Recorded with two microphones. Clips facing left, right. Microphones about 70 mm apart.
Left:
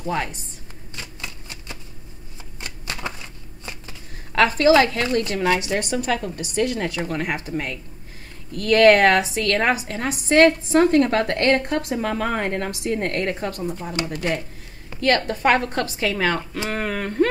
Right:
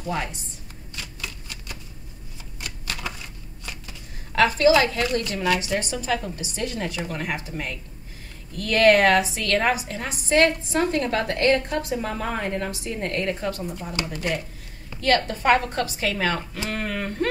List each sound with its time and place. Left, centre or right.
0.9 s typewriter: left
3.2 s a sound: left
4.4 s a woman's voice: left
5.9 s a woman's voice: left